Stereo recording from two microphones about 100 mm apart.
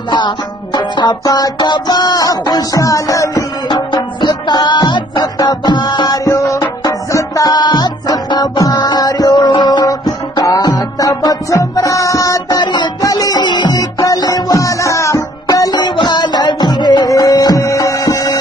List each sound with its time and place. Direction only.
0.7 s music: 45° left (ahead or behind)
3.6 s music: 50° left (ahead or behind)
7.4 s music: 45° left (ahead or behind)
12.5 s music: 50° left (ahead or behind); by 15.2 s 30° left (ahead or behind)
15.4 s music: 40° left (ahead or behind)